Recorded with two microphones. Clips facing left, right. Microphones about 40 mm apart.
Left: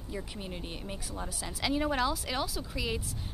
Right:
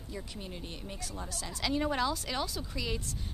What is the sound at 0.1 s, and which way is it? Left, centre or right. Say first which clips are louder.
A woman's voice: left 3 dB; centre.